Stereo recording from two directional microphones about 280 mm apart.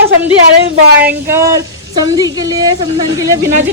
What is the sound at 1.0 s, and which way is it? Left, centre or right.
A woman's voice, centre.